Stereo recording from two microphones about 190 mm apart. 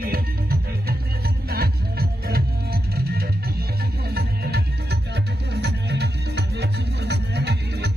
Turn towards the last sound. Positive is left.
turn(degrees=-60)  # may be behind; listen again after turning